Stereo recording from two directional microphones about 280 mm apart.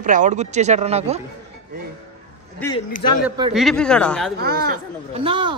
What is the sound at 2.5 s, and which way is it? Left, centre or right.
Speech, centre.